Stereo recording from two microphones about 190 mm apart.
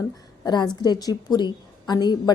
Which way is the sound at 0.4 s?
20° left (ahead or behind).